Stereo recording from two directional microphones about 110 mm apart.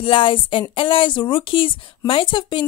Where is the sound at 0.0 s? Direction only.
50° left (ahead or behind).